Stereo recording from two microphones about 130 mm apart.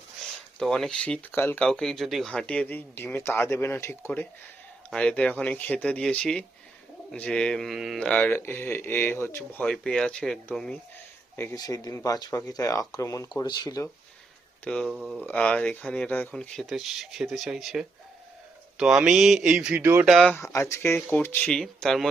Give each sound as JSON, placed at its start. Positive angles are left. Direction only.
{"t": 0.3, "sound": "speech", "side_deg": 0}
{"t": 1.6, "sound": "speech", "side_deg": 5}
{"t": 4.9, "sound": "speech", "side_deg": 10}
{"t": 7.9, "sound": "speech", "side_deg": 10}
{"t": 9.6, "sound": "speech", "side_deg": 5}
{"t": 11.5, "sound": "speech", "side_deg": 30}
{"t": 14.6, "sound": "speech", "side_deg": 5}
{"t": 20.1, "sound": "speech", "side_deg": 5}
{"t": 20.5, "sound": "speech", "side_deg": 20}